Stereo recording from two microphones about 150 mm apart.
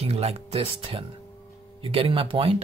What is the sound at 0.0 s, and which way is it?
Speech, 40° right (ahead or behind).